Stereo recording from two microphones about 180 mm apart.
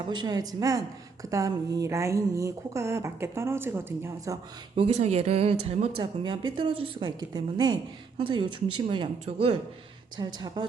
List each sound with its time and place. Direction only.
0.1 s speech: 25° right (ahead or behind)
4.8 s speech: 35° right (ahead or behind)